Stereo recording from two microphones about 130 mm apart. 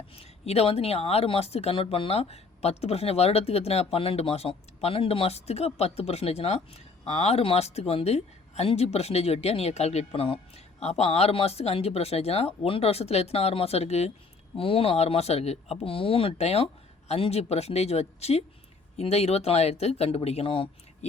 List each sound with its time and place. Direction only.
0.1 s speech: 50° left (ahead or behind)